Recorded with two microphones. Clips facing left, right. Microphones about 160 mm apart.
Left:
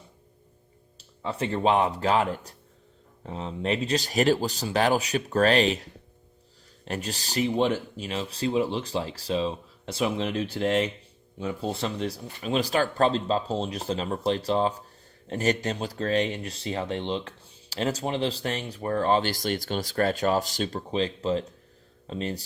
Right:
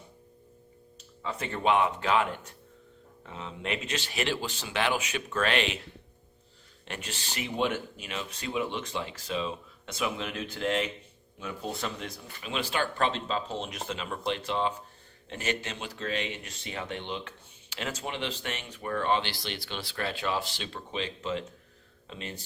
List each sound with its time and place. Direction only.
0.9 s speech: 30° left (ahead or behind)